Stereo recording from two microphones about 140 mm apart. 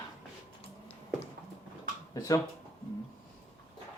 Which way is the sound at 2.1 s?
25° left (ahead or behind).